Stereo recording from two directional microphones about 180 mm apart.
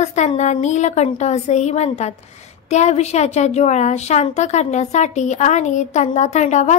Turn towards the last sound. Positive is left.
turn(degrees=40)  # may be behind; listen again after turning